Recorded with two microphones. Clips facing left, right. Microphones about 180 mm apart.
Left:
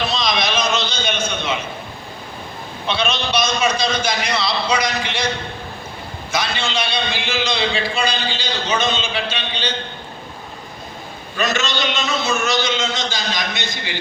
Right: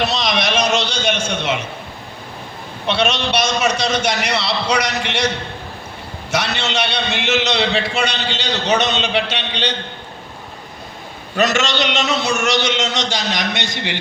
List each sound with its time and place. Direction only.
0.0 s a sound: 75° right (ahead or behind)
2.8 s a man's voice: 75° right (ahead or behind)
6.3 s a man's voice: 75° right (ahead or behind)
11.3 s a man's voice: 75° right (ahead or behind)